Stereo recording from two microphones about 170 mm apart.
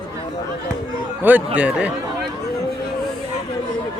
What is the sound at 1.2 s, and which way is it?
Speech, 10° right (ahead or behind).